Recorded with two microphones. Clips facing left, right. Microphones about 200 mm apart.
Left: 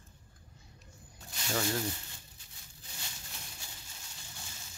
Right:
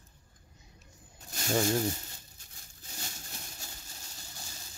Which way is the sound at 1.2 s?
45° right (ahead or behind).